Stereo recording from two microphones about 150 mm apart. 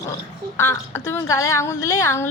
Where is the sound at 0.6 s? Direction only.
15° left (ahead or behind).